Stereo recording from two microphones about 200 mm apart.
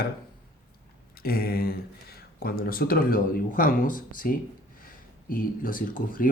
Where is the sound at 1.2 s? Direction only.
50° left (ahead or behind).